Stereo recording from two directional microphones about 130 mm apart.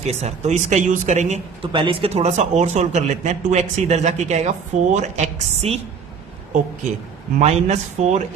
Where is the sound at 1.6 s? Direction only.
40° right (ahead or behind); by 5.7 s 60° right (ahead or behind).